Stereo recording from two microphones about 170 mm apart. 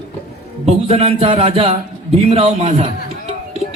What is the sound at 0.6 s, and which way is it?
A man's voice, 35° right (ahead or behind).